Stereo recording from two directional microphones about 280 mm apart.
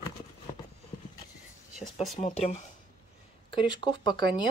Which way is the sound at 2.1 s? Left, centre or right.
Left.